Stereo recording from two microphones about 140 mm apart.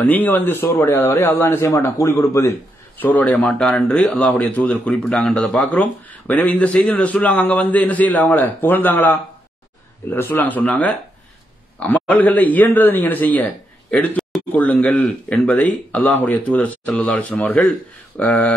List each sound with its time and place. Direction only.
0.0 s speech: 10° left (ahead or behind)
3.0 s speech: 10° left (ahead or behind)